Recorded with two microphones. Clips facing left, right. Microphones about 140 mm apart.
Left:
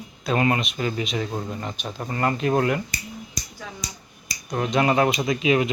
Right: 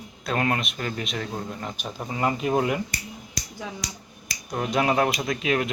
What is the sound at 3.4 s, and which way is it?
Finger snapping, 90° right.